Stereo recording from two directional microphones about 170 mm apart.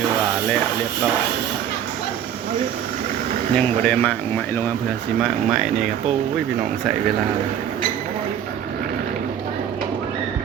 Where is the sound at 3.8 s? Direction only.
10° left (ahead or behind).